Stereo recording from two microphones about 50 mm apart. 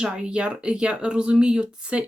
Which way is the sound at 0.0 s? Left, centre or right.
Centre.